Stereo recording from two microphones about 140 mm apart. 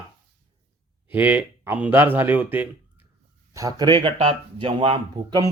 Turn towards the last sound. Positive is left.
turn(degrees=-40)  # may be behind; listen again after turning